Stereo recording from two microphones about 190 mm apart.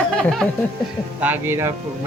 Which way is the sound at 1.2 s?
10° right (ahead or behind).